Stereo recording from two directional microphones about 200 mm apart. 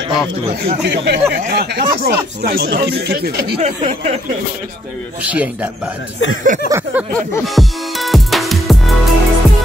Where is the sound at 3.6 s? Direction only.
35° right (ahead or behind).